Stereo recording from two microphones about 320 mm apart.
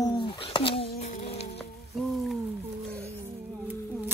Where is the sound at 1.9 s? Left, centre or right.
Centre.